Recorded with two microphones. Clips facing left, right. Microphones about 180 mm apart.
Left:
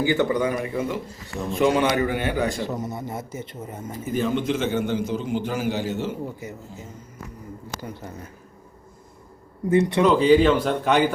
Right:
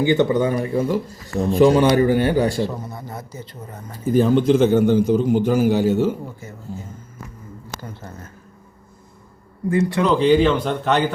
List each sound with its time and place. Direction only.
0.0 s a man's voice: 20° right (ahead or behind)
2.6 s a man's voice: 20° left (ahead or behind)
4.0 s a man's voice: 35° right (ahead or behind)
7.8 s speech: 10° left (ahead or behind)
9.6 s a man's voice: 25° left (ahead or behind)
10.0 s speech: 5° left (ahead or behind)